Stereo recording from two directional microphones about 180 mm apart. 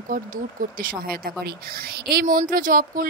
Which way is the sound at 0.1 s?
50° right (ahead or behind).